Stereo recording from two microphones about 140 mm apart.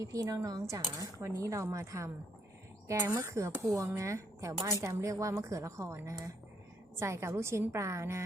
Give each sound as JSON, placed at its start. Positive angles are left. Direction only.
{"t": 0.0, "sound": "speech", "side_deg": -25}